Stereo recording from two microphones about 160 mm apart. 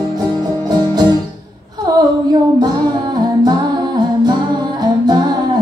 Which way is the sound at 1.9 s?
25° right (ahead or behind).